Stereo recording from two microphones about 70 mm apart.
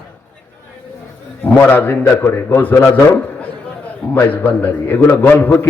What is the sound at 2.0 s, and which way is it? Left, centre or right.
Speech, left.